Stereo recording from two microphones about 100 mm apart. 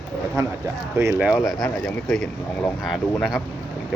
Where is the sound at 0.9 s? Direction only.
30° right (ahead or behind).